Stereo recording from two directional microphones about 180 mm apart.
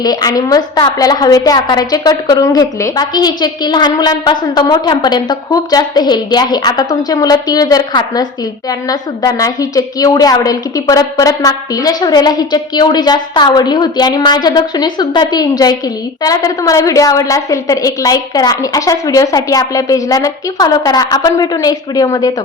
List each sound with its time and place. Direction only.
0.0 s a woman's voice: 20° left (ahead or behind)